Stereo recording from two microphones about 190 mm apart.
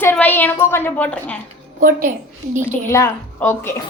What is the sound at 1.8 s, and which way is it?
Speech, 45° right (ahead or behind).